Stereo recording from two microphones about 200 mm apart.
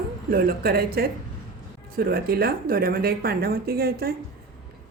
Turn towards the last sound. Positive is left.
turn(degrees=-50)  # may be behind; listen again after turning